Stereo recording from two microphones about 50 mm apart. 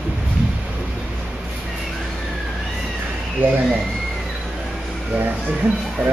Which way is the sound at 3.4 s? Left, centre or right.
Right.